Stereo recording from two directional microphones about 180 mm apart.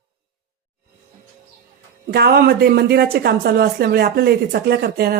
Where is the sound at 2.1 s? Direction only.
60° right (ahead or behind).